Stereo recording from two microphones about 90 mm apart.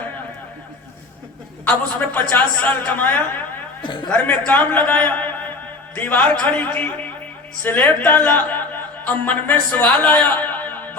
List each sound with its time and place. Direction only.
1.6 s a man's voice: 20° left (ahead or behind)